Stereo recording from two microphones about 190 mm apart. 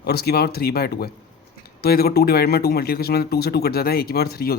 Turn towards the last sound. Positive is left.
turn(degrees=55)  # may be behind; listen again after turning